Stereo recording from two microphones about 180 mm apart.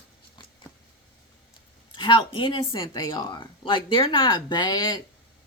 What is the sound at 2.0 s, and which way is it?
Speech, 25° left (ahead or behind).